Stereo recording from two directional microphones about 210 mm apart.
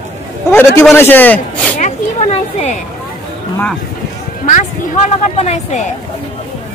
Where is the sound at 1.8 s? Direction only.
35° left (ahead or behind).